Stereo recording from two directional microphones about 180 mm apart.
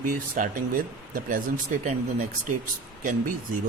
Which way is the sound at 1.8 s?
40° right (ahead or behind).